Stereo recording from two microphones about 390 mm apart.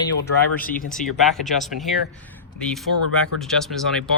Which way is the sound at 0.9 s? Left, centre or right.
Centre.